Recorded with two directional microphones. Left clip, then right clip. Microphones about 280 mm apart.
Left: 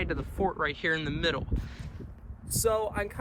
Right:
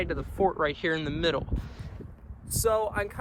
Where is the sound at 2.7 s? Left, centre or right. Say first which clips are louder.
Right 2 dB; centre.